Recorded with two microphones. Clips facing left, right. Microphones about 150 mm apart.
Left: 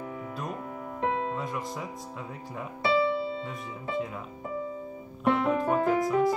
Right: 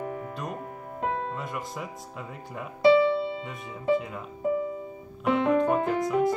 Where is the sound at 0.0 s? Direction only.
50° right (ahead or behind).